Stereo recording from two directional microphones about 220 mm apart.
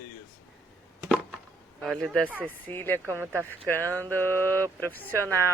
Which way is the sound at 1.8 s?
Centre (ahead or behind).